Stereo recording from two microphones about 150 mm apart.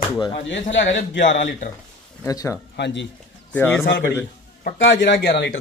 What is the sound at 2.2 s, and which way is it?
Speech, 20° left (ahead or behind).